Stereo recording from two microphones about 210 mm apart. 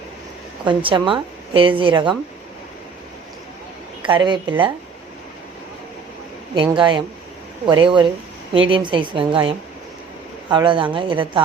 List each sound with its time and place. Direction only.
0.6 s a woman's voice: 25° right (ahead or behind)
4.0 s a woman's voice: 20° right (ahead or behind)
6.5 s a woman's voice: 25° right (ahead or behind)